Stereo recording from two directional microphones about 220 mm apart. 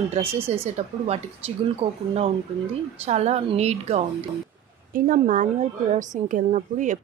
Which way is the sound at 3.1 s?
30° right (ahead or behind).